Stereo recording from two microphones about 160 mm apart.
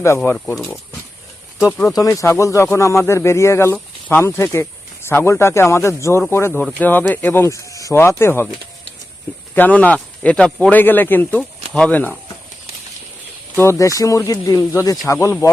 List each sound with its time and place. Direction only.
0.3 s speech: centre (ahead or behind)
1.5 s speech: 20° left (ahead or behind)
6.5 s speech: 5° left (ahead or behind)
9.6 s speech: 10° left (ahead or behind)
13.6 s speech: 20° left (ahead or behind)